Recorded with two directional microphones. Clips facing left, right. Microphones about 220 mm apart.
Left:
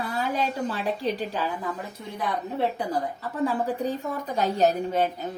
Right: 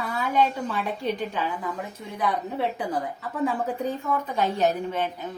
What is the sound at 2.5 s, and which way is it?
Speech, 35° left (ahead or behind).